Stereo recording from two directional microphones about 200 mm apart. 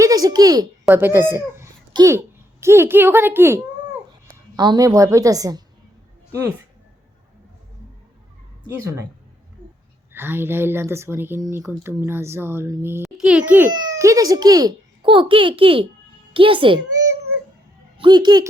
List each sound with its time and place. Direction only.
0.0 s a child's voice: 20° right (ahead or behind)
8.6 s a child's voice: 15° right (ahead or behind)
10.1 s a child's voice: 10° right (ahead or behind)
13.7 s a child's voice: 15° right (ahead or behind)
17.9 s speech: 25° right (ahead or behind)